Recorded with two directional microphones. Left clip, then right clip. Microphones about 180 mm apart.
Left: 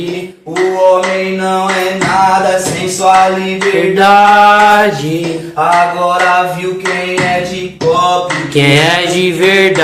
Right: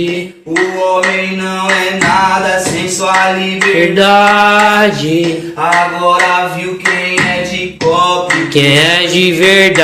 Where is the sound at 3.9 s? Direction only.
10° right (ahead or behind).